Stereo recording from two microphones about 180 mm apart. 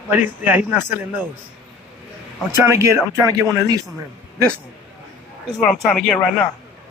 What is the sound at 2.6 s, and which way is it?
Speech, 15° right (ahead or behind).